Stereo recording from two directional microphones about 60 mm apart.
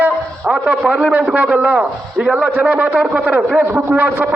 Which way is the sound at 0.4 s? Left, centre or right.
Centre.